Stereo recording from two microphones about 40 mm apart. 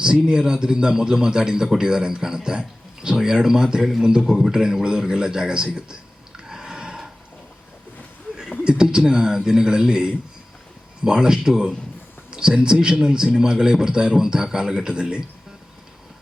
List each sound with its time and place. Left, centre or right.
0.0 s a man's voice: centre
8.6 s a man's voice: centre